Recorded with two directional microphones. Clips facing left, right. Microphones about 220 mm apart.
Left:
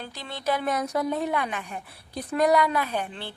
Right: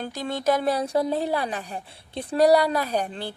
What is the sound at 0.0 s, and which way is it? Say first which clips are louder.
Speech: right 6 dB; 45° right (ahead or behind).